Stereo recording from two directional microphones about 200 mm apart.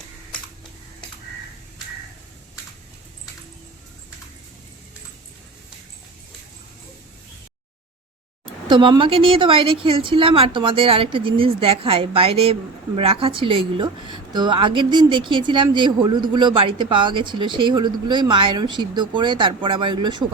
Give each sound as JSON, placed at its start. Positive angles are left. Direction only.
{"t": 8.6, "sound": "a woman's voice", "side_deg": -25}